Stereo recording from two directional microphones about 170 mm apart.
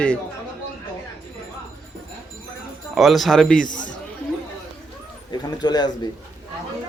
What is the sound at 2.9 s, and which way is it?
Speech, centre (ahead or behind).